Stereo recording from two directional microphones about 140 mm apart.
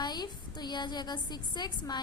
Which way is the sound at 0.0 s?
30° left (ahead or behind).